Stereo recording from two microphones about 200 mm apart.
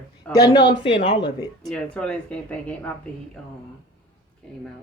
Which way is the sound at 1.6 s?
5° left (ahead or behind).